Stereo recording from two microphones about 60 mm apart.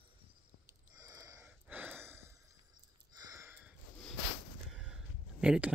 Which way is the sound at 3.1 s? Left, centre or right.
Right.